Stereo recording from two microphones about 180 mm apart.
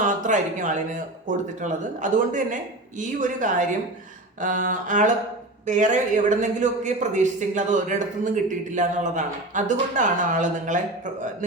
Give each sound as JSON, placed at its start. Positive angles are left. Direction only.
{"t": 0.0, "sound": "a man's voice", "side_deg": -45}